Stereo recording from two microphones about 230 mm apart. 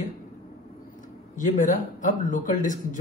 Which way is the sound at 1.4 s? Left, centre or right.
Left.